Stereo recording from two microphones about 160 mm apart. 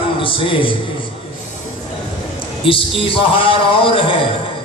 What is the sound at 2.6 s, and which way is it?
A man's voice, 35° left (ahead or behind).